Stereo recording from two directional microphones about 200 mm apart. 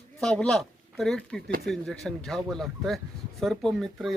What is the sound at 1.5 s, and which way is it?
Speech, 50° right (ahead or behind).